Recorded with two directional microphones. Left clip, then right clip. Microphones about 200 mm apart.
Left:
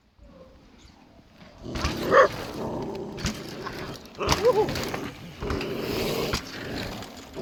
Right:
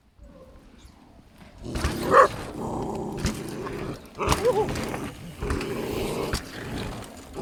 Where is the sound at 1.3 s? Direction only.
Centre (ahead or behind).